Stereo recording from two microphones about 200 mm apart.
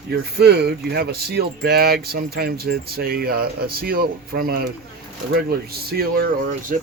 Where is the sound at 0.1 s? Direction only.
55° right (ahead or behind).